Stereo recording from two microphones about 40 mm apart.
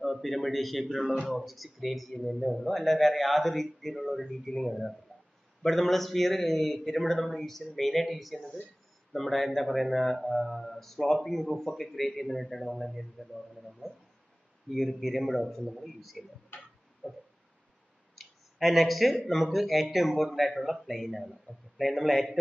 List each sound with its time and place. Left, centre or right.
0.0 s a man's voice: centre
17.0 s a sound: left
18.1 s speech: centre